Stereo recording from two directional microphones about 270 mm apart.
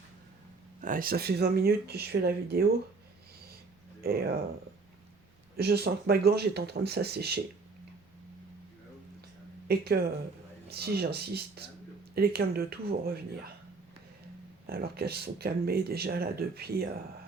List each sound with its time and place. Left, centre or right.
0.8 s speech: right
4.0 s speech: right
5.5 s speech: right
9.6 s speech: right
14.7 s speech: right